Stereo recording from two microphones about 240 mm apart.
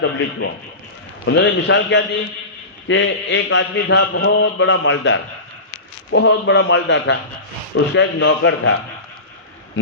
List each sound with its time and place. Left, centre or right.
0.0 s a man's voice: left